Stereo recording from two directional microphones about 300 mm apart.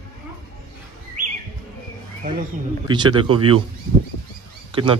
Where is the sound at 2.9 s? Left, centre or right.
Centre.